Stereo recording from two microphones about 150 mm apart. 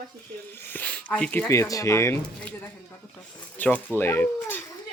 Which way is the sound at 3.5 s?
10° left (ahead or behind).